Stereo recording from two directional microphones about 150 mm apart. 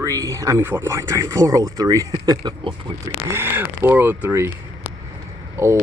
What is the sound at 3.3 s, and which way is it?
Speech, 15° right (ahead or behind).